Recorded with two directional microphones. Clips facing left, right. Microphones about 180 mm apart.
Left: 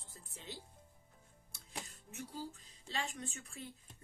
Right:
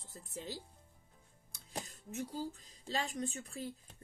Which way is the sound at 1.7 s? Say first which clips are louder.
Right 5 dB; 40° right (ahead or behind).